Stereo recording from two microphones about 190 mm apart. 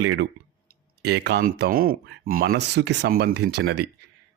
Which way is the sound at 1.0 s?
60° right (ahead or behind).